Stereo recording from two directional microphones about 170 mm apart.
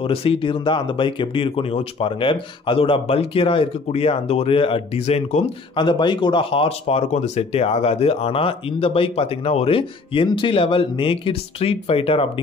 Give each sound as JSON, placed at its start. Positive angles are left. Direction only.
{"t": 0.0, "sound": "speech", "side_deg": 35}
{"t": 5.8, "sound": "speech", "side_deg": 25}